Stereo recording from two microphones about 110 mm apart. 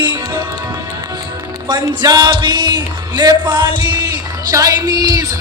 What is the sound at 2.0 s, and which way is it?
Music, 40° right (ahead or behind).